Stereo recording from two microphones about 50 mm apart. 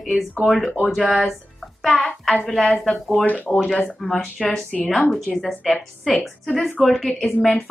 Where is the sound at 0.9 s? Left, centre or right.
Centre.